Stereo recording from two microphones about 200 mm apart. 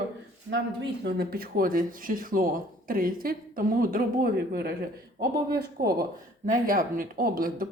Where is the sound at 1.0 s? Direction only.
50° right (ahead or behind).